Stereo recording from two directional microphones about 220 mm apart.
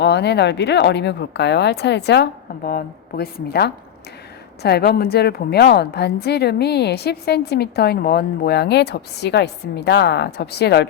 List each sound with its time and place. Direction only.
0.0 s a woman's voice: 50° left (ahead or behind)